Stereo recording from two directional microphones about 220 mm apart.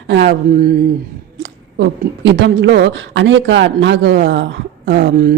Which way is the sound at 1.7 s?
50° right (ahead or behind).